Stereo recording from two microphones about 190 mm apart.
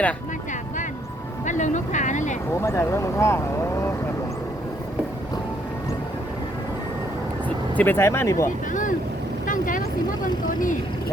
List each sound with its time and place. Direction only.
1.5 s speech: 40° left (ahead or behind)
2.6 s speech: 15° left (ahead or behind)
7.4 s speech: 10° left (ahead or behind)
9.5 s vehicle: 45° left (ahead or behind)